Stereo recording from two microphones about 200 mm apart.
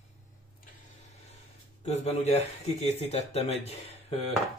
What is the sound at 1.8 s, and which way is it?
Speech, 35° left (ahead or behind).